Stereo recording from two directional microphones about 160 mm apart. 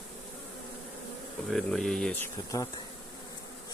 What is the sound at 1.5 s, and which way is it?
Speech, centre (ahead or behind).